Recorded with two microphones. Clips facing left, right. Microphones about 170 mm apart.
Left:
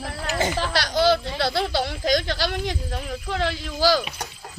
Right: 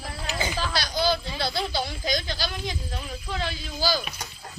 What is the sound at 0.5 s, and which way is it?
Speech, 70° left (ahead or behind).